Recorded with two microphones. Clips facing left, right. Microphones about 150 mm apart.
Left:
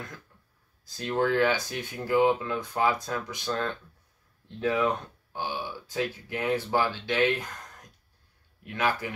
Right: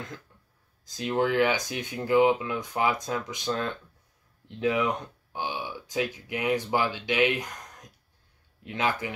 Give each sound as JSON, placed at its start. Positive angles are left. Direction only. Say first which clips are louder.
{"t": 0.8, "sound": "speech", "louder": "right 1 dB", "side_deg": -15}